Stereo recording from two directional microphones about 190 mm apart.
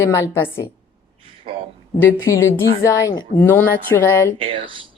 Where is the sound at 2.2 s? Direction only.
15° left (ahead or behind).